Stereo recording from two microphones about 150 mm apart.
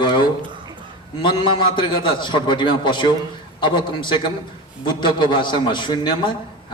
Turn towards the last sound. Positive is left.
turn(degrees=30)  # may be behind; listen again after turning